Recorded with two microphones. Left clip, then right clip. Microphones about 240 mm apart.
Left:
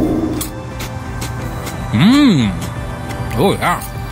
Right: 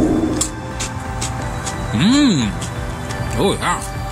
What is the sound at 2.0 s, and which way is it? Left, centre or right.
Speech, left.